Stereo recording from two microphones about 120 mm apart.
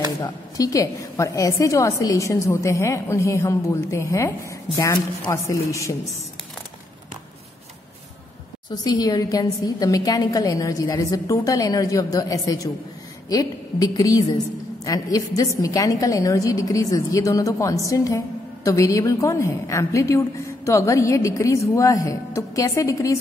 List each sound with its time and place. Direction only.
0.2 s a woman's voice: 30° left (ahead or behind)
8.6 s a woman's voice: 35° left (ahead or behind)